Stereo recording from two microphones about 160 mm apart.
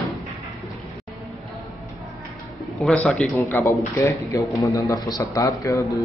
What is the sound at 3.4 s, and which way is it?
A man's voice, 15° left (ahead or behind).